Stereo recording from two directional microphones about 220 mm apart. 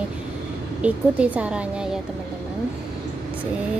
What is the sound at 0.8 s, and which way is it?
A woman's voice, 5° right (ahead or behind).